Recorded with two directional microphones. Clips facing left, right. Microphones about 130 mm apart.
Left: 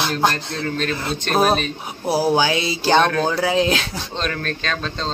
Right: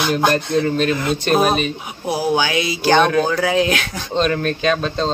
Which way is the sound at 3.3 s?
30° left (ahead or behind).